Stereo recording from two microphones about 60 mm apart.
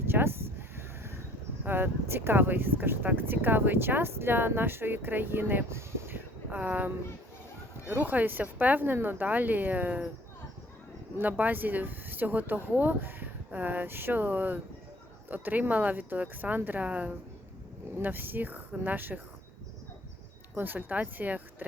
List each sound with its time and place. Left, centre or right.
0.1 s a sound: right
0.8 s neigh: right
1.6 s speech: right
6.0 s vehicle: right
6.5 s a woman's voice: right
11.2 s a woman's voice: right
20.6 s speech: right